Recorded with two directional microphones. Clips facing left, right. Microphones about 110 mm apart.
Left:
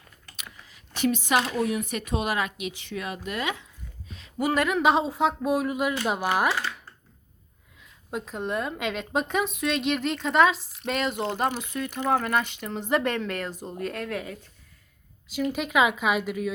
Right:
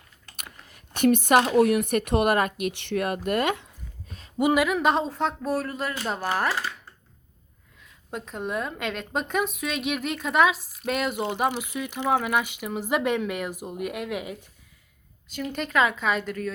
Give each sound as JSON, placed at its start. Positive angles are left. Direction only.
{"t": 0.3, "sound": "speech", "side_deg": -55}
{"t": 4.5, "sound": "speech", "side_deg": -5}
{"t": 8.1, "sound": "a woman's voice", "side_deg": 0}
{"t": 15.3, "sound": "speech", "side_deg": 5}